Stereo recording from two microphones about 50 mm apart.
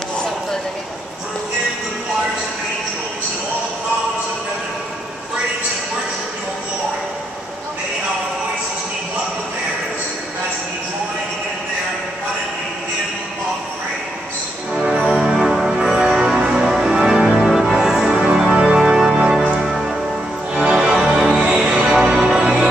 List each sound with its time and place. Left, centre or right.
14.7 s music: centre
19.6 s music: centre
21.9 s music: centre
22.3 s music: centre